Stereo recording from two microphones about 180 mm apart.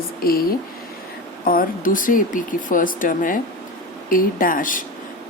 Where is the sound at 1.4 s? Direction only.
50° left (ahead or behind).